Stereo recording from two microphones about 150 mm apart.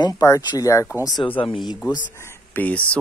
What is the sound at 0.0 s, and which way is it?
Speech, 25° left (ahead or behind).